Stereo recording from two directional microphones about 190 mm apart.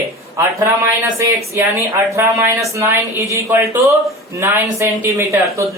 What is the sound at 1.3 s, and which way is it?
Speech, 15° right (ahead or behind).